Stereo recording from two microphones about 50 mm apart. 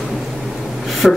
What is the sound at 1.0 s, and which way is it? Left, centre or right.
Speech, centre.